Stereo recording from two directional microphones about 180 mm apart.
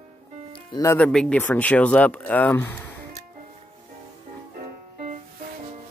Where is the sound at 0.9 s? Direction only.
5° left (ahead or behind).